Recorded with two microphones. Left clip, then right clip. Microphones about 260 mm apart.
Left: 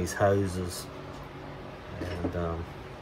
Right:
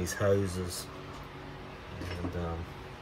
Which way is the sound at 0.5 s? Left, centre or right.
Right.